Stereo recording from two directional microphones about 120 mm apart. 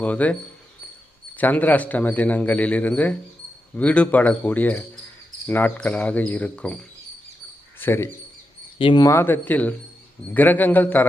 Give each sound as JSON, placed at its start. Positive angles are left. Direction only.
{"t": 0.0, "sound": "a man's voice", "side_deg": 10}
{"t": 1.4, "sound": "a man's voice", "side_deg": 15}
{"t": 7.8, "sound": "speech", "side_deg": 20}
{"t": 8.8, "sound": "speech", "side_deg": 40}
{"t": 9.0, "sound": "a man's voice", "side_deg": 20}